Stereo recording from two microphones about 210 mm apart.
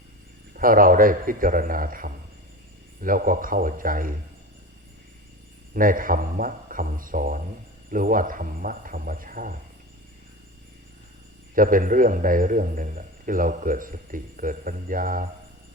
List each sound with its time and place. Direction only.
0.5 s a man's voice: 40° right (ahead or behind)
5.7 s a man's voice: 40° right (ahead or behind)
11.5 s a man's voice: 40° right (ahead or behind)